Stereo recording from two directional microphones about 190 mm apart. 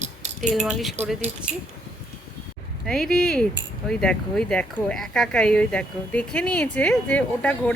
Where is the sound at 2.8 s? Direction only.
Centre (ahead or behind).